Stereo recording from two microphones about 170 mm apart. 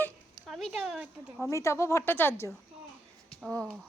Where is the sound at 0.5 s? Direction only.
Centre (ahead or behind).